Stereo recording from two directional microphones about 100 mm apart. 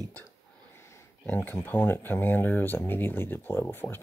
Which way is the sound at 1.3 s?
20° left (ahead or behind).